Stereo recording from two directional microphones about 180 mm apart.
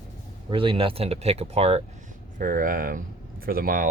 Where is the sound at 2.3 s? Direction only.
50° right (ahead or behind).